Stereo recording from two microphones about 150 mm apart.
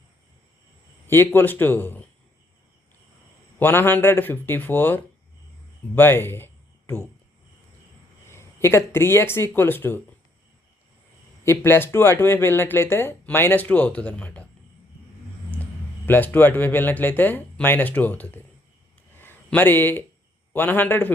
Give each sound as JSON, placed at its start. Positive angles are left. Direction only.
{"t": 1.0, "sound": "speech", "side_deg": 15}
{"t": 3.6, "sound": "speech", "side_deg": 15}
{"t": 8.3, "sound": "speech", "side_deg": 15}
{"t": 11.4, "sound": "speech", "side_deg": 15}
{"t": 16.0, "sound": "speech", "side_deg": 15}
{"t": 19.1, "sound": "a sound", "side_deg": 15}
{"t": 20.5, "sound": "speech", "side_deg": 10}